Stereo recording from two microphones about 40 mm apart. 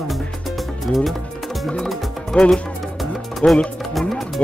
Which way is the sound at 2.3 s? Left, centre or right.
Centre.